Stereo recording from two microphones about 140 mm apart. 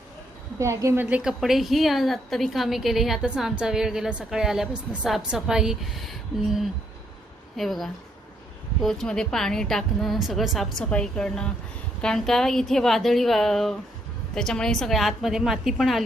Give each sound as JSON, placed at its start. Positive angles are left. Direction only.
{"t": 0.6, "sound": "a woman's voice", "side_deg": -20}
{"t": 1.1, "sound": "a woman's voice", "side_deg": -5}